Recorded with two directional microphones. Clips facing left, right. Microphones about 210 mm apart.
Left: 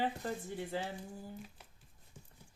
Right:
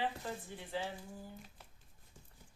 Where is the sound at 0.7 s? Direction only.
45° left (ahead or behind).